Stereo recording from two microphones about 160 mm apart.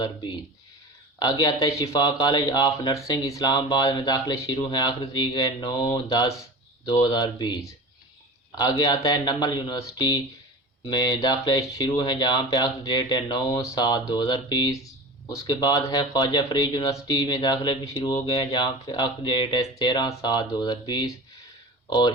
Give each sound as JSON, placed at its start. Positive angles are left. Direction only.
{"t": 1.2, "sound": "speech", "side_deg": 25}